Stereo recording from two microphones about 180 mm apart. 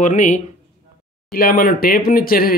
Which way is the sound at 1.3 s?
55° left (ahead or behind).